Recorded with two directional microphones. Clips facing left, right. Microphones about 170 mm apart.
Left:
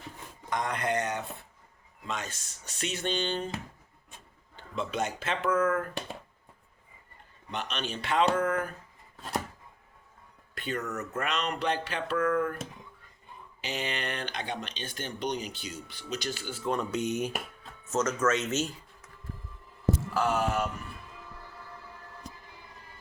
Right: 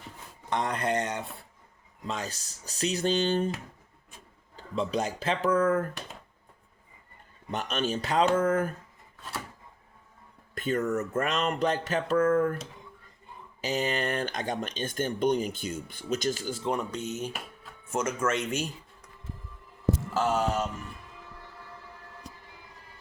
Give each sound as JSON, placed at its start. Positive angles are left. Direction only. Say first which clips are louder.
{"t": 0.5, "sound": "speech", "louder": "right 2 dB", "side_deg": -30}
{"t": 4.5, "sound": "speech", "louder": "right 4 dB", "side_deg": -35}
{"t": 7.5, "sound": "speech", "louder": "right 5 dB", "side_deg": -45}
{"t": 10.5, "sound": "speech", "louder": "right 7 dB", "side_deg": -45}
{"t": 13.6, "sound": "speech", "louder": "right 6 dB", "side_deg": -40}
{"t": 16.9, "sound": "speech", "louder": "left 4 dB", "side_deg": 15}
{"t": 17.8, "sound": "speech", "louder": "left 1 dB", "side_deg": -10}
{"t": 20.1, "sound": "music", "louder": "right 1 dB", "side_deg": -25}